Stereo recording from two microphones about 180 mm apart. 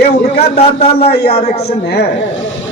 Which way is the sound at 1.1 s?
60° left (ahead or behind).